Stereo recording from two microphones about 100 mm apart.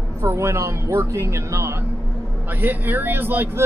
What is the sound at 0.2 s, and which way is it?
Speech, 25° right (ahead or behind).